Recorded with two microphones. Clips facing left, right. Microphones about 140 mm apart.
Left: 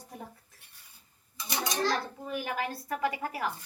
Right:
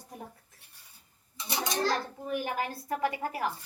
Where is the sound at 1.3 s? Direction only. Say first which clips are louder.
Even; 30° right (ahead or behind).